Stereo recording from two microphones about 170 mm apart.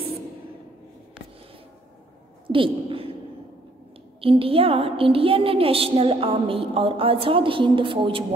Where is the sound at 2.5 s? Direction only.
30° right (ahead or behind).